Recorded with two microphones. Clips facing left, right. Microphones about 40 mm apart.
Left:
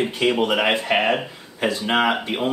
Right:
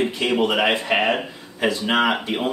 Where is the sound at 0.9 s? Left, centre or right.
Centre.